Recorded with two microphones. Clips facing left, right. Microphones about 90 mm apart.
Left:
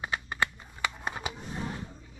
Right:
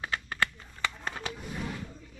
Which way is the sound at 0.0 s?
15° left (ahead or behind).